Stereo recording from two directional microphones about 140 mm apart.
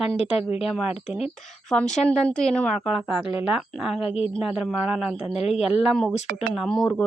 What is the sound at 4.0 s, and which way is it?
Speech, 45° left (ahead or behind).